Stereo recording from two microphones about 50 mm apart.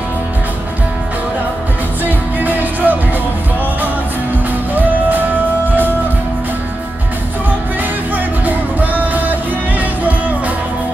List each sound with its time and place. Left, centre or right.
2.0 s music: right
4.7 s music: right
8.5 s music: right